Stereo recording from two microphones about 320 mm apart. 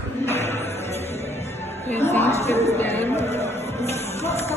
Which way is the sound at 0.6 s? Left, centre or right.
Centre.